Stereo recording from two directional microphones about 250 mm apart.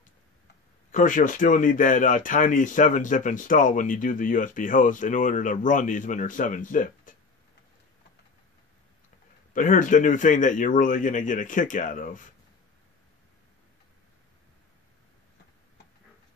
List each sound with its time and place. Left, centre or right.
0.9 s speech: left
9.5 s speech: left